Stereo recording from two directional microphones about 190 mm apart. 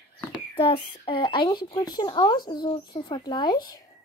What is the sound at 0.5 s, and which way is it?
Speech, 30° left (ahead or behind).